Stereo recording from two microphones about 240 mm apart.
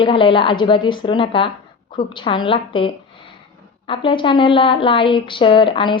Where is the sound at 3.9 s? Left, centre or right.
Left.